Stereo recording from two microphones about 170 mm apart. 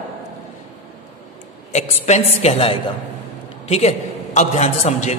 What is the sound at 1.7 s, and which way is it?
A man's voice, 40° left (ahead or behind).